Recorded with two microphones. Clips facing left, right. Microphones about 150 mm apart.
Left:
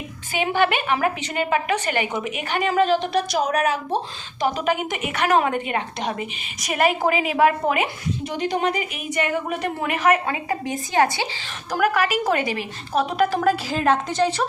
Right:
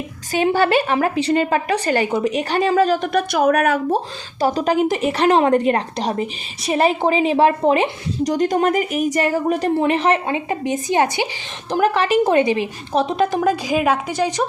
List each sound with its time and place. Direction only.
0.3 s speech: 40° right (ahead or behind); by 4.0 s 55° right (ahead or behind)
4.4 s a woman's voice: 35° right (ahead or behind); by 14.4 s 15° right (ahead or behind)